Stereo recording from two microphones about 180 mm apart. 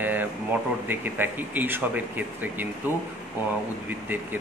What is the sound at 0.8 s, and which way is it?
Speech, 10° right (ahead or behind).